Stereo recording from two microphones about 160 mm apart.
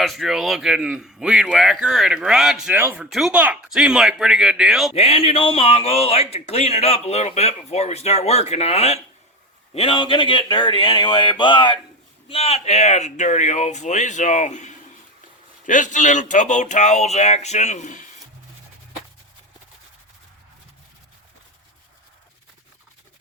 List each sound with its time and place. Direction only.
0.0 s speech: centre (ahead or behind)
4.9 s speech: 40° left (ahead or behind)